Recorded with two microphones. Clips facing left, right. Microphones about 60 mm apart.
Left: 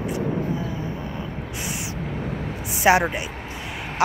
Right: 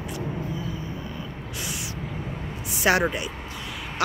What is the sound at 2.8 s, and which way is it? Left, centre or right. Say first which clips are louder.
Speech: left 4 dB; centre.